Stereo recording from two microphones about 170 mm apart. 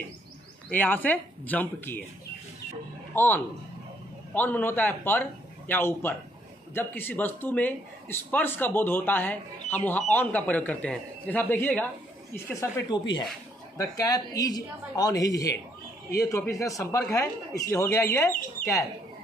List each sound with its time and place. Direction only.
0.7 s a man's voice: 10° left (ahead or behind)
3.2 s a man's voice: 10° left (ahead or behind)
12.9 s a woman's voice: 25° left (ahead or behind)